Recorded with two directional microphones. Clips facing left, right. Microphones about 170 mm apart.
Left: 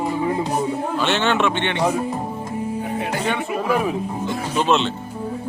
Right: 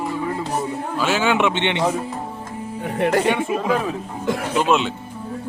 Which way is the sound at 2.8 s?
70° right (ahead or behind).